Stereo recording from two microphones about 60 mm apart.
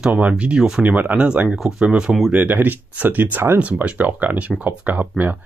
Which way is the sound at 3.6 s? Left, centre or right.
Right.